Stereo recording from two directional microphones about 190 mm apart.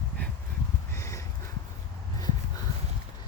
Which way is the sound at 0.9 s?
15° left (ahead or behind).